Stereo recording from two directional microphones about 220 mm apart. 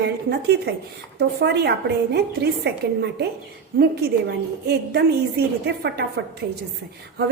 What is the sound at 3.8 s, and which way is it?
A woman's voice, 45° right (ahead or behind).